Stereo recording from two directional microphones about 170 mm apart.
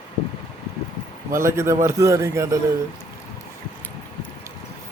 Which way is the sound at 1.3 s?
15° right (ahead or behind).